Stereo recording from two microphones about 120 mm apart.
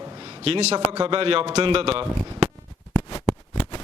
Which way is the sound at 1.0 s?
50° right (ahead or behind).